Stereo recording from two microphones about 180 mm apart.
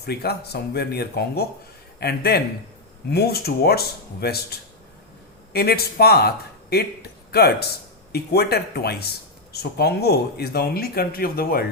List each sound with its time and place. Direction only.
0.0 s speech: 60° left (ahead or behind)
5.5 s speech: 60° left (ahead or behind)